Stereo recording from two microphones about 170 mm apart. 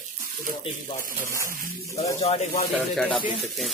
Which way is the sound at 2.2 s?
40° left (ahead or behind).